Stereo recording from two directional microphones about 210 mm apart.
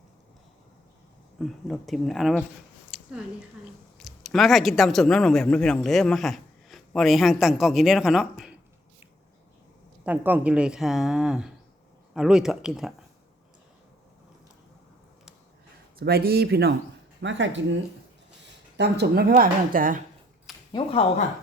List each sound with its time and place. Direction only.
1.4 s speech: centre (ahead or behind)
2.9 s a sound: 5° right (ahead or behind)
3.9 s speech: centre (ahead or behind)
10.0 s speech: 10° right (ahead or behind)
16.0 s speech: 45° right (ahead or behind)
20.5 s a sound: centre (ahead or behind)